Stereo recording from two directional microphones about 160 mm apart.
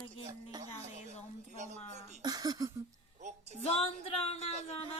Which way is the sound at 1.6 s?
45° right (ahead or behind).